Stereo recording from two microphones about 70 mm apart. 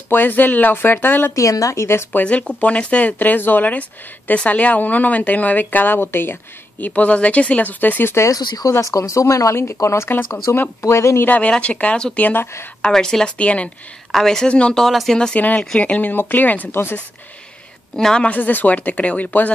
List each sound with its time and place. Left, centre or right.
0.1 s speech: left
1.3 s speech: left
2.1 s speech: centre
6.8 s speech: left
8.3 s speech: left
8.8 s speech: left
11.2 s speech: centre
12.8 s speech: centre
15.8 s speech: left
17.9 s speech: centre
18.2 s speech: left